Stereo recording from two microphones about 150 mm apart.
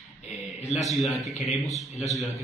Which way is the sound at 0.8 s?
Centre (ahead or behind).